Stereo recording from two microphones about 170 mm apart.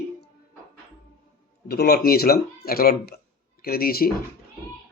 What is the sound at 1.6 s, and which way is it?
Speech, 65° left (ahead or behind).